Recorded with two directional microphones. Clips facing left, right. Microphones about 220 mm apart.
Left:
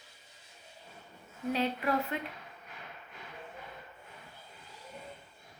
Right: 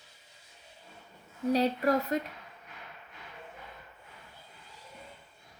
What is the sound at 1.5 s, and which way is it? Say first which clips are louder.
Speech: right 5 dB; 40° right (ahead or behind).